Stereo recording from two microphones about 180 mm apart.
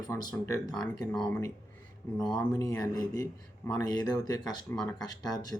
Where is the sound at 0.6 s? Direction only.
Centre (ahead or behind).